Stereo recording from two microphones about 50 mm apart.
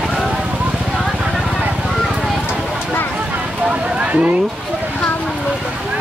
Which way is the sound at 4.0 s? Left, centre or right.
Right.